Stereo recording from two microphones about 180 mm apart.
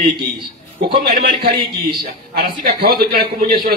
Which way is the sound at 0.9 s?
55° right (ahead or behind).